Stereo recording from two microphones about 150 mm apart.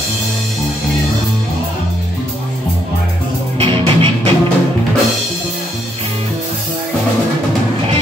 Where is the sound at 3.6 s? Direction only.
40° right (ahead or behind).